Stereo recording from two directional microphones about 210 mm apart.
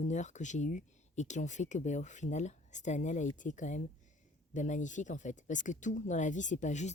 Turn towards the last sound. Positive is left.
turn(degrees=35)  # may be behind; listen again after turning